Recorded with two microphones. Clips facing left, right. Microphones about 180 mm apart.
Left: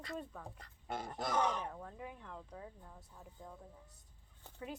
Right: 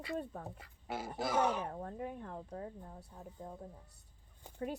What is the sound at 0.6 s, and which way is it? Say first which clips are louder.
Speech: left 1 dB; 5° right (ahead or behind).